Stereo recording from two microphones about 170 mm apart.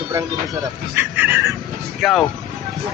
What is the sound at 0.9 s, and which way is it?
Speech, 10° right (ahead or behind).